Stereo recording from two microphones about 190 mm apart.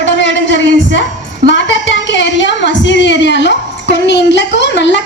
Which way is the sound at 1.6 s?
70° left (ahead or behind).